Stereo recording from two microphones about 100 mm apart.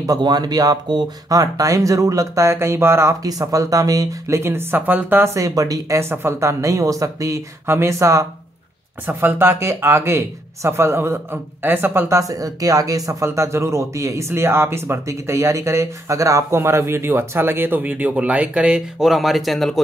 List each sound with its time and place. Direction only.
0.0 s speech: 40° right (ahead or behind)
4.4 s speech: 25° right (ahead or behind); by 19.8 s centre (ahead or behind)